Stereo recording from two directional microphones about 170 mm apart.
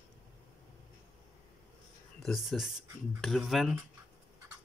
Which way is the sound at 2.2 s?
Centre (ahead or behind).